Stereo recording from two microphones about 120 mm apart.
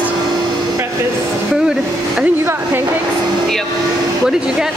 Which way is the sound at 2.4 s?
20° right (ahead or behind).